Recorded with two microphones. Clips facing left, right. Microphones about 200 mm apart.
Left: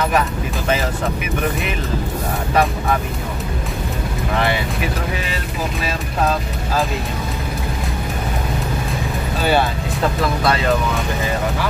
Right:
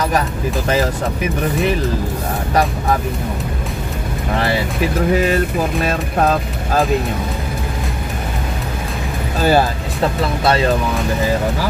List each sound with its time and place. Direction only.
5.9 s speech: 50° right (ahead or behind)
9.4 s speech: 40° right (ahead or behind)